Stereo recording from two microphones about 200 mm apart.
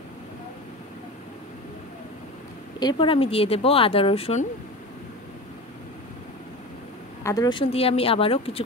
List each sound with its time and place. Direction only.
2.8 s speech: 25° left (ahead or behind)
7.2 s speech: 20° left (ahead or behind)